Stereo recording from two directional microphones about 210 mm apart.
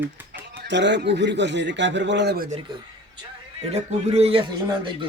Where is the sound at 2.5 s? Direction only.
25° right (ahead or behind).